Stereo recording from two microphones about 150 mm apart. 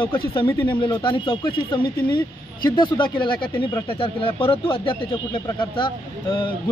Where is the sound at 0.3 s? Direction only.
35° left (ahead or behind).